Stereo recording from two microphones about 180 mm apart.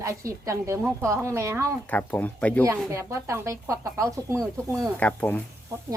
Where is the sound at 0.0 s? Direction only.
15° right (ahead or behind).